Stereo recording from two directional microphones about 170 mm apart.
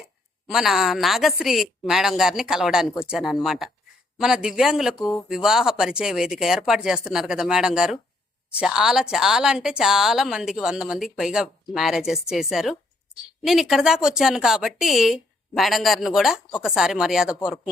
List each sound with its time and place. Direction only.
0.4 s speech: centre (ahead or behind)
4.9 s speech: 20° left (ahead or behind)
5.3 s speech: 5° right (ahead or behind)